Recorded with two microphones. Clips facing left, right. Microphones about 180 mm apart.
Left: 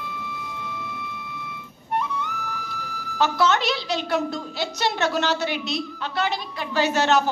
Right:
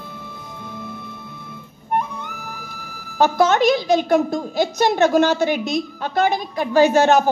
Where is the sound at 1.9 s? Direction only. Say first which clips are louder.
Right 2 dB; 50° right (ahead or behind).